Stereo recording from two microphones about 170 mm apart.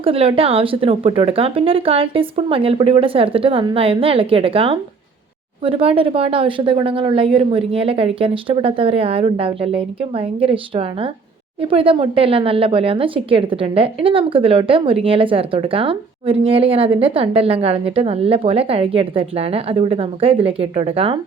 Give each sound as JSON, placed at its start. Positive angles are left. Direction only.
{"t": 0.0, "sound": "a woman's voice", "side_deg": -35}